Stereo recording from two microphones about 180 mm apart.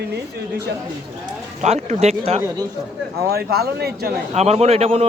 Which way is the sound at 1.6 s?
40° right (ahead or behind).